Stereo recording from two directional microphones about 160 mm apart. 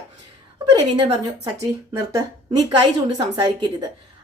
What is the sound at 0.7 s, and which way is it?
A woman's voice, 25° right (ahead or behind).